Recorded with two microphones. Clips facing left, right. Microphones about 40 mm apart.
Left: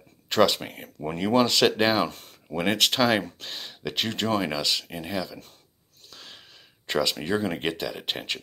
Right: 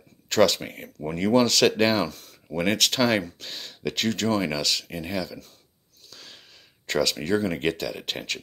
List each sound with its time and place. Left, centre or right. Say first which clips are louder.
0.3 s speech: right 1 dB; centre
2.0 s speech: left 1 dB; left
2.5 s speech: even; centre
6.0 s a sound: left 1 dB; left
6.9 s speech: right 1 dB; centre